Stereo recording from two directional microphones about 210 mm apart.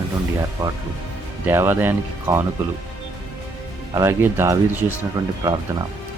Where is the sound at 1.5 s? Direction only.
10° right (ahead or behind).